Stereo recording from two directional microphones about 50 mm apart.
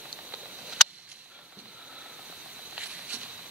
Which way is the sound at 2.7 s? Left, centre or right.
Right.